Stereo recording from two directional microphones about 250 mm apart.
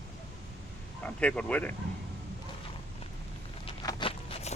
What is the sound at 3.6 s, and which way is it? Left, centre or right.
Walk, centre.